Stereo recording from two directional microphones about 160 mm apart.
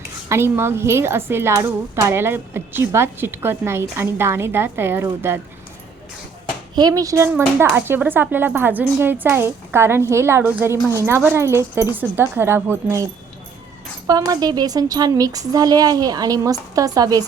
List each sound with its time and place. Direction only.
0.3 s a woman's voice: 15° right (ahead or behind)
6.7 s a woman's voice: 25° right (ahead or behind)
14.1 s a woman's voice: 25° right (ahead or behind)